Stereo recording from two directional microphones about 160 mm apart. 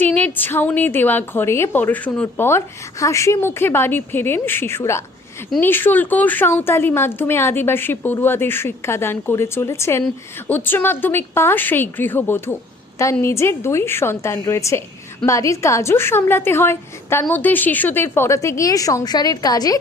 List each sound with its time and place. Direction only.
0.0 s a woman's voice: 10° left (ahead or behind)